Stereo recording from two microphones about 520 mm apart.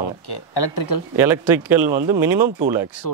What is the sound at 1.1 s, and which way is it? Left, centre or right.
Speech, centre.